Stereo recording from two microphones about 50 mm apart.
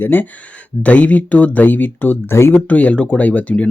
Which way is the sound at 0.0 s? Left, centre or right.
Left.